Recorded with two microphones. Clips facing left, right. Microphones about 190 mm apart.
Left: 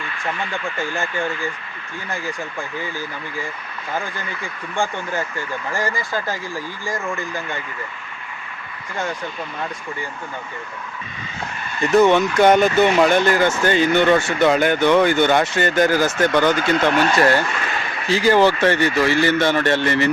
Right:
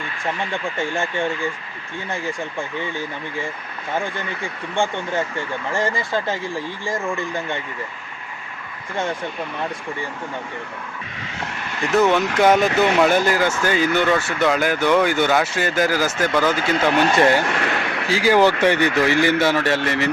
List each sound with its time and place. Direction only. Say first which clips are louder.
0.5 s speech: right 1 dB; 25° right (ahead or behind)
11.3 s vehicle: left 2 dB; 80° right
11.9 s speech: left 3 dB; 5° right (ahead or behind)
14.2 s speech: left 3 dB; 25° left (ahead or behind)
14.4 s speech: left 2 dB; centre (ahead or behind)
16.9 s speech: right 3 dB; 20° right (ahead or behind)
17.4 s a sound: right 3 dB; 65° right (ahead or behind)
18.1 s speech: left 1 dB; 10° right (ahead or behind)